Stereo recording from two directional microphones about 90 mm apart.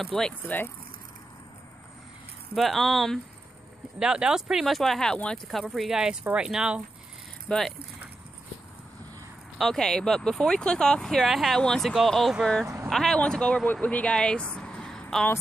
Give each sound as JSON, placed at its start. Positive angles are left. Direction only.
{"t": 0.0, "sound": "speech", "side_deg": 5}
{"t": 2.5, "sound": "speech", "side_deg": 0}
{"t": 7.4, "sound": "speech", "side_deg": 5}
{"t": 9.6, "sound": "speech", "side_deg": 5}
{"t": 12.6, "sound": "vehicle", "side_deg": -25}
{"t": 12.9, "sound": "speech", "side_deg": 5}
{"t": 14.5, "sound": "a sound", "side_deg": 10}